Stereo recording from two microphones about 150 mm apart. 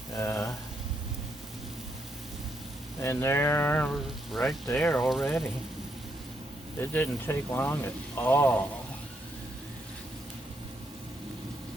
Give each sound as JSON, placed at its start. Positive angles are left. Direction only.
{"t": 0.2, "sound": "speech", "side_deg": 15}
{"t": 3.0, "sound": "speech", "side_deg": 15}
{"t": 4.3, "sound": "speech", "side_deg": 0}
{"t": 6.9, "sound": "speech", "side_deg": 15}